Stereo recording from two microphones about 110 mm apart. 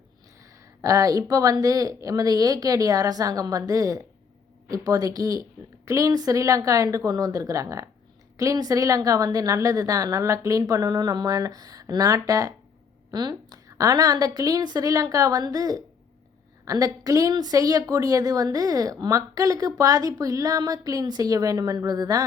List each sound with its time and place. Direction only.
0.8 s a woman's voice: 30° right (ahead or behind)